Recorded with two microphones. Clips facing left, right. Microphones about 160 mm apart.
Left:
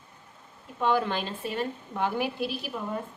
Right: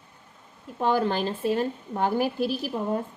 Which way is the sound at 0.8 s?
40° right (ahead or behind).